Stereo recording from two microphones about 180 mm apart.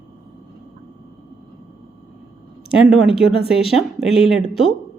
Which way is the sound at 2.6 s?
Centre (ahead or behind).